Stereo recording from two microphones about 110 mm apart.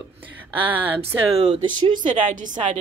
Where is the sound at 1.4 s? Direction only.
40° right (ahead or behind).